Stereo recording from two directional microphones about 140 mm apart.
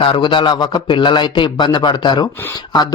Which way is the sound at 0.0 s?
35° left (ahead or behind).